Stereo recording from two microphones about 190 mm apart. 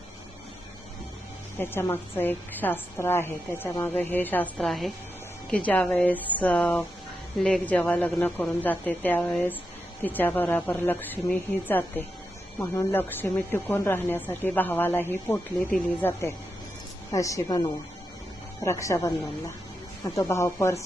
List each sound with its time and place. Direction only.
1.5 s a woman's voice: 10° left (ahead or behind)
20.1 s a woman's voice: 15° left (ahead or behind)